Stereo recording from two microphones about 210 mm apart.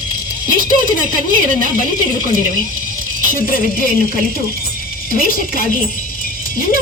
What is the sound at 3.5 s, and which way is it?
Speech, 40° left (ahead or behind).